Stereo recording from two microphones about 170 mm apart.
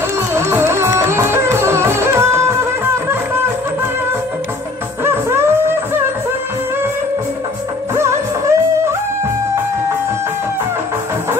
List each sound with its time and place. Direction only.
0.3 s music: 15° right (ahead or behind)
5.0 s music: 15° right (ahead or behind)
7.9 s music: 15° right (ahead or behind)